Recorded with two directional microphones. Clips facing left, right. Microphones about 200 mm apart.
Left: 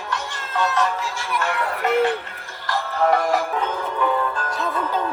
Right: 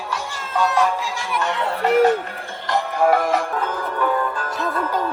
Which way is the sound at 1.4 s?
20° right (ahead or behind).